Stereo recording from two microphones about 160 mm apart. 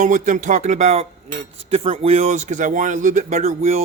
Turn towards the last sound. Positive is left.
turn(degrees=-45)  # may be behind; listen again after turning